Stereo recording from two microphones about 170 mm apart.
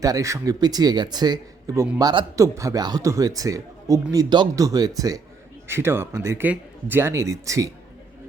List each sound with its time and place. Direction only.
0.0 s a man's voice: 20° right (ahead or behind)